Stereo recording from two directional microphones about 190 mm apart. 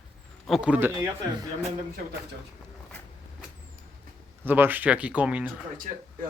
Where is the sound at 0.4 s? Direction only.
Centre (ahead or behind).